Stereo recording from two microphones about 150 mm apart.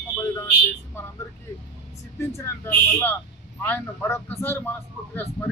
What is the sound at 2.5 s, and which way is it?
Speech, 15° left (ahead or behind).